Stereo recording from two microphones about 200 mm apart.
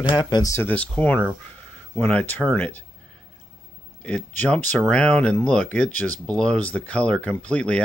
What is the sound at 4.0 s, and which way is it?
Speech, 5° left (ahead or behind).